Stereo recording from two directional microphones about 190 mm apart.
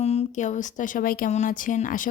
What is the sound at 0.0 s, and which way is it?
Speech, 35° left (ahead or behind).